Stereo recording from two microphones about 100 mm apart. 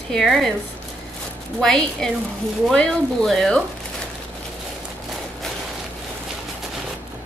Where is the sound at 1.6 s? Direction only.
5° left (ahead or behind).